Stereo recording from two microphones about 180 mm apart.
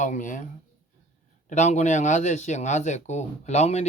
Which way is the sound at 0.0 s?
45° left (ahead or behind).